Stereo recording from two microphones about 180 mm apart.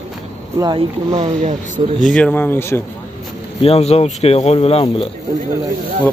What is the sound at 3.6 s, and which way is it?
Speech, 35° left (ahead or behind).